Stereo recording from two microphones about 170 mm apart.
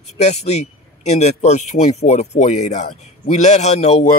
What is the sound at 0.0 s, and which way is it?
Speech, 40° left (ahead or behind).